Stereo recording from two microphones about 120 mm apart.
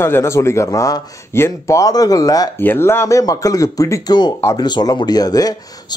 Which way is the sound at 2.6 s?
20° left (ahead or behind).